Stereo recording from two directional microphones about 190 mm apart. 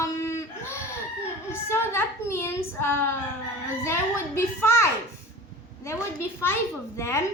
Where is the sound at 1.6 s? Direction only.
10° left (ahead or behind).